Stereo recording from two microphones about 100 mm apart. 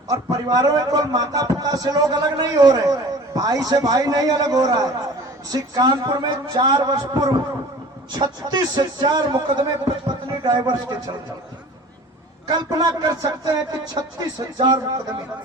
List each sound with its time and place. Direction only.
0.1 s a man's voice: 40° right (ahead or behind)
12.5 s a man's voice: 40° right (ahead or behind)